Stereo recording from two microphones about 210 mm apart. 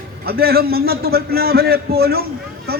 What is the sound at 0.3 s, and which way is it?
A man's voice, 45° right (ahead or behind).